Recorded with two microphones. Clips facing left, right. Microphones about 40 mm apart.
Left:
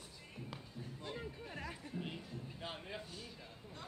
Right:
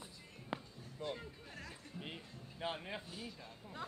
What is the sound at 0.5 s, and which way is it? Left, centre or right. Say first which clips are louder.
Music: right 13 dB; right.